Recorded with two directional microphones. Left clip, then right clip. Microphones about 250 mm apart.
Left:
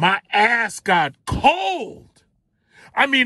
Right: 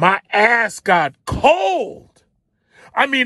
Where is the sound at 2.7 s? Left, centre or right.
Centre.